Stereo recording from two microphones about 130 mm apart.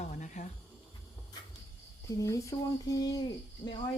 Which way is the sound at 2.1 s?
25° left (ahead or behind).